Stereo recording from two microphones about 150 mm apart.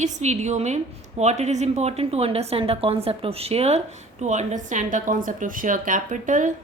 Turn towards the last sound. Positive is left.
turn(degrees=-60)  # may be behind; listen again after turning